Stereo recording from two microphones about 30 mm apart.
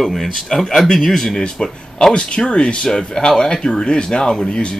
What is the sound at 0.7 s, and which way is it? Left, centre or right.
Speech, centre.